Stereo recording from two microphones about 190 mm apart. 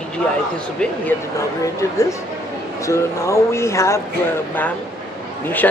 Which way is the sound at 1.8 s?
15° left (ahead or behind).